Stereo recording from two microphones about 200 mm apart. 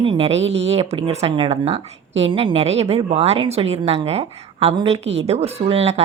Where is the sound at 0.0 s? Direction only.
30° right (ahead or behind).